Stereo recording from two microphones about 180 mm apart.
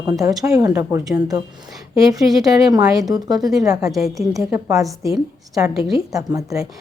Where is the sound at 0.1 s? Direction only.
20° right (ahead or behind).